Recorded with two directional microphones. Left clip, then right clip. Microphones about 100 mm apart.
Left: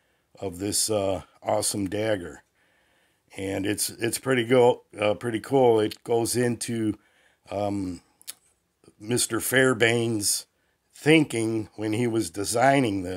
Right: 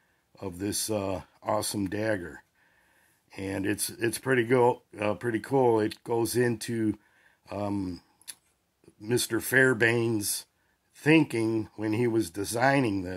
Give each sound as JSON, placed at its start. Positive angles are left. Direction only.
{"t": 0.3, "sound": "speech", "side_deg": 30}
{"t": 9.0, "sound": "speech", "side_deg": 30}